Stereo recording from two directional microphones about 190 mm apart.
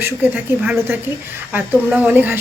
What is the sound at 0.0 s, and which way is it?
A woman's voice, 10° right (ahead or behind).